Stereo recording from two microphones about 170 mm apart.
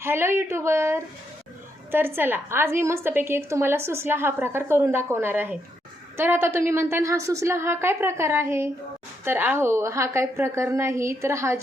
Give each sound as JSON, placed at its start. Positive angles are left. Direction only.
{"t": 0.0, "sound": "a woman's voice", "side_deg": -15}